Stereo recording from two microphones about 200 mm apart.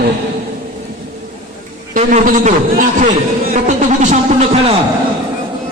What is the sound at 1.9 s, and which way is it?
A man's voice, 40° right (ahead or behind).